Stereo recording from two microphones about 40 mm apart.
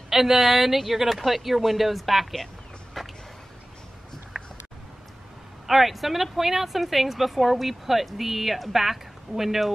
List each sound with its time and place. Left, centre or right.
0.1 s speech: centre
4.3 s a sound: centre
5.7 s speech: centre